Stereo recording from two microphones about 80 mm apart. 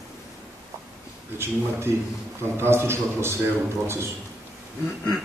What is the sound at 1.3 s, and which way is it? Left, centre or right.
A man's voice, right.